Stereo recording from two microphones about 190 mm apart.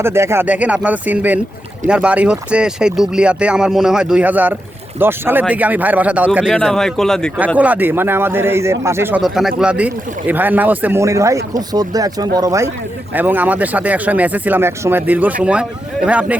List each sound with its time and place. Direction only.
0.0 s a man's voice: 15° right (ahead or behind); by 7.3 s 5° left (ahead or behind)
7.3 s a man's voice: 10° right (ahead or behind)